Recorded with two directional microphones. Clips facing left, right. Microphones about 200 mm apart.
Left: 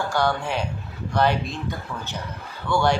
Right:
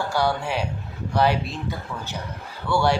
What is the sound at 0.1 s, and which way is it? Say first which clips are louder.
A man's voice: right 1 dB; 10° right (ahead or behind).